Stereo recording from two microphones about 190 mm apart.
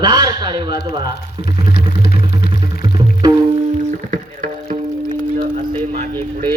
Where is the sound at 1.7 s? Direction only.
60° left (ahead or behind).